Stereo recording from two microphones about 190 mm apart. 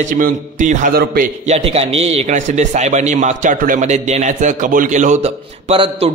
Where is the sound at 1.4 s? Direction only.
30° right (ahead or behind).